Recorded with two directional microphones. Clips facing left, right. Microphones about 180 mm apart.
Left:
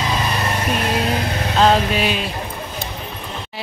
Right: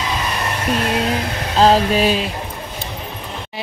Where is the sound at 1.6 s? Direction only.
35° right (ahead or behind).